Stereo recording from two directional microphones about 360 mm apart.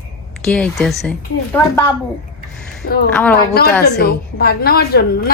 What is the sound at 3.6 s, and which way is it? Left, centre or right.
A woman's voice, left.